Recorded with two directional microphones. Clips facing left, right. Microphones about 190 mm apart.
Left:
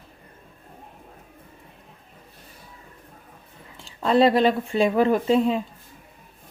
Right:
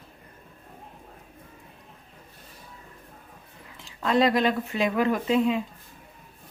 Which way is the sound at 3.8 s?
30° left (ahead or behind).